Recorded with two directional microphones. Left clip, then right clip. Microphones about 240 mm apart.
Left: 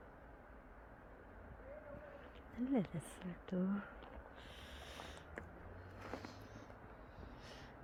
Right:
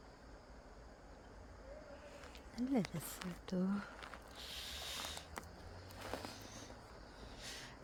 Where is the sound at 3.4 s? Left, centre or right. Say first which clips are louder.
Even; centre.